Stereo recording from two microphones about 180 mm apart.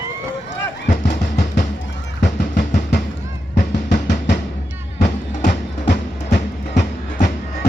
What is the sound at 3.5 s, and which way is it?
Drum, 55° left (ahead or behind).